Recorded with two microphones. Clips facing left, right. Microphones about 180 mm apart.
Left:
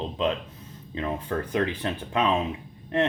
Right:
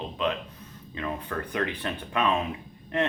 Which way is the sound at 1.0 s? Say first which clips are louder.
Left 4 dB; 25° left (ahead or behind).